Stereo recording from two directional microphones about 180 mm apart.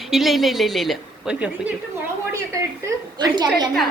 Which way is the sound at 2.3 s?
15° right (ahead or behind).